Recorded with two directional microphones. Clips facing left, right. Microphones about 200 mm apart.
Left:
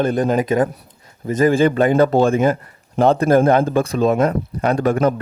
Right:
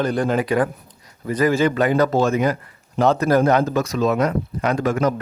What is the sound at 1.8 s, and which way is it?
Speech, 25° left (ahead or behind).